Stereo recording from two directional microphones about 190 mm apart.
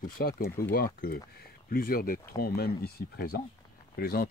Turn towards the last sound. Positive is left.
turn(degrees=55)  # may be behind; listen again after turning